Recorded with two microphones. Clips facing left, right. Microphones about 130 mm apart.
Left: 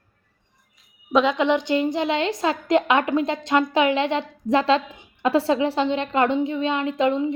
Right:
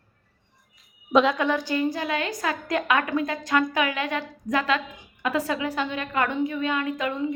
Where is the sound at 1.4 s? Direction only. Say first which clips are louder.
Left 4 dB; 20° left (ahead or behind).